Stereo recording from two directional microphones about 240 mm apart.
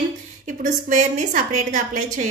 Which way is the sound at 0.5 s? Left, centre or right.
Right.